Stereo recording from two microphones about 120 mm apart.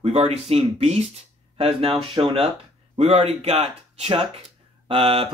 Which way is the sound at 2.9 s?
55° right (ahead or behind).